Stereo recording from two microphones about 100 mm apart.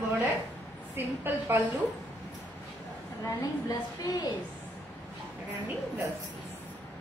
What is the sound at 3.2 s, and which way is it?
A woman's voice, 40° left (ahead or behind).